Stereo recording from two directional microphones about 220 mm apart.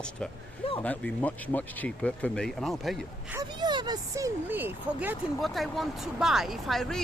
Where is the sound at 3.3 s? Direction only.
20° right (ahead or behind).